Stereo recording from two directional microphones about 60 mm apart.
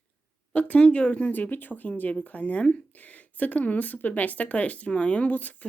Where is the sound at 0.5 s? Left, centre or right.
Left.